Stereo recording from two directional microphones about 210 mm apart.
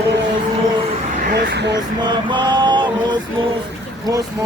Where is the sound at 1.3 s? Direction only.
50° right (ahead or behind).